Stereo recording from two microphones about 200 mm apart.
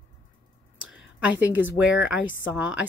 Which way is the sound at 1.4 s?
10° right (ahead or behind).